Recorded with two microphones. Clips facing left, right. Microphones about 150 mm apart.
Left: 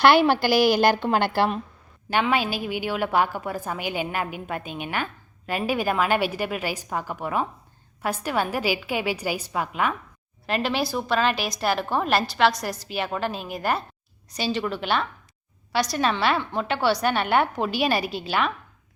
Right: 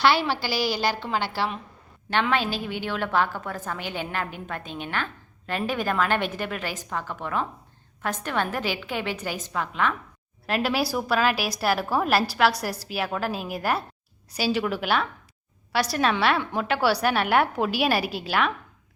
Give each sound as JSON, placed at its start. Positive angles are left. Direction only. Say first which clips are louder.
{"t": 0.0, "sound": "a woman's voice", "louder": "left 5 dB", "side_deg": 55}
{"t": 2.0, "sound": "a woman's voice", "louder": "left 1 dB", "side_deg": 10}
{"t": 10.4, "sound": "a woman's voice", "louder": "even", "side_deg": -5}
{"t": 16.4, "sound": "a woman's voice", "louder": "even", "side_deg": -10}